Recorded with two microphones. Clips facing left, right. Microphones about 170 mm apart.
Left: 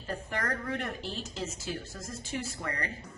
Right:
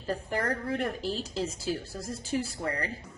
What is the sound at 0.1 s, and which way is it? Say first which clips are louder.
A woman's voice: right 4 dB; 35° right (ahead or behind).